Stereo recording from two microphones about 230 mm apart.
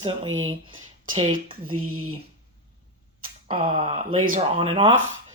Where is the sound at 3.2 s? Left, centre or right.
Right.